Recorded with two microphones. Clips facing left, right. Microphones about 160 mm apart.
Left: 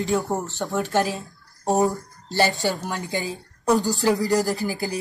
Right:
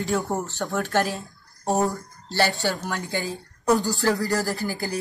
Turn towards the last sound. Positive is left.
turn(degrees=15)  # may be behind; listen again after turning